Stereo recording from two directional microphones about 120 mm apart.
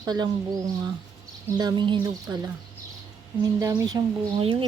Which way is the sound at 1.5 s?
35° right (ahead or behind).